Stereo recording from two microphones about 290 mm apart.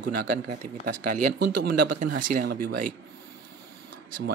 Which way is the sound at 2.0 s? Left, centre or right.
Right.